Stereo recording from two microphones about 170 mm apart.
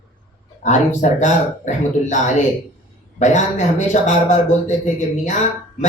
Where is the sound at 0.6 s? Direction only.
45° left (ahead or behind).